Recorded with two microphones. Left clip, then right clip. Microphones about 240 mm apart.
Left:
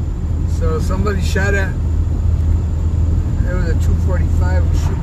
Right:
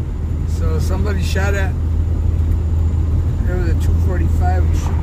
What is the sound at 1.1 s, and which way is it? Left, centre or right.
Speech, centre.